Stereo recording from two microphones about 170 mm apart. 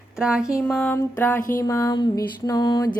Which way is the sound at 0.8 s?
10° left (ahead or behind).